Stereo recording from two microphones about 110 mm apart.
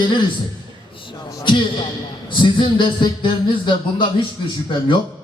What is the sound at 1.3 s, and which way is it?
A man's voice, 40° left (ahead or behind).